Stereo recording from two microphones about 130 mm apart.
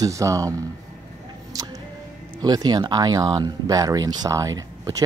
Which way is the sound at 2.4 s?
30° right (ahead or behind).